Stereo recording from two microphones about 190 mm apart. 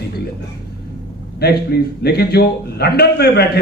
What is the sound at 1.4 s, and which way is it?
A man's voice, 55° left (ahead or behind).